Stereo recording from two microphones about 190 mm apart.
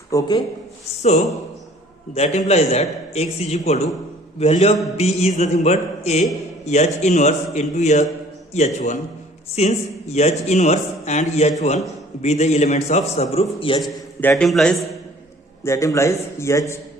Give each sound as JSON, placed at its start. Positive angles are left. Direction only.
{"t": 0.1, "sound": "a man's voice", "side_deg": 20}
{"t": 2.1, "sound": "a man's voice", "side_deg": 35}
{"t": 13.8, "sound": "a man's voice", "side_deg": 5}
{"t": 15.6, "sound": "a man's voice", "side_deg": 15}